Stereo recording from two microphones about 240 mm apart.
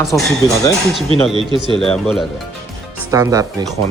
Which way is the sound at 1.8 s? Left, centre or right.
Centre.